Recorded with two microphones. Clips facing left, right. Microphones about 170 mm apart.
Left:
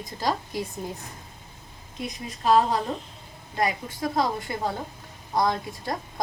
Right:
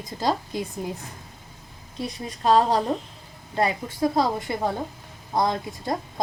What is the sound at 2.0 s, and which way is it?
Speech, 35° right (ahead or behind).